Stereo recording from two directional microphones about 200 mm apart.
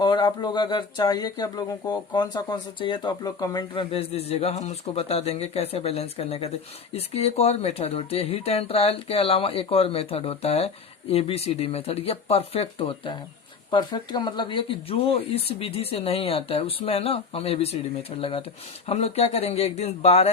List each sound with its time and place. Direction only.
0.0 s speech: 20° left (ahead or behind)